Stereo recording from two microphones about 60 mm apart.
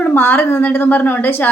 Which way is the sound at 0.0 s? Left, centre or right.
Left.